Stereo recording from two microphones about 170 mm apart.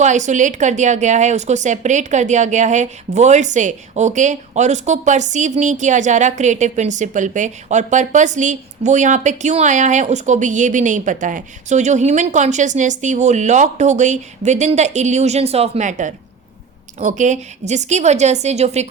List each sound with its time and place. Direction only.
0.0 s a woman's voice: 45° right (ahead or behind)